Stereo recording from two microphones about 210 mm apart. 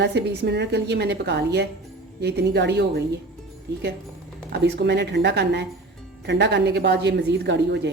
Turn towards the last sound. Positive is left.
turn(degrees=-55)  # may be behind; listen again after turning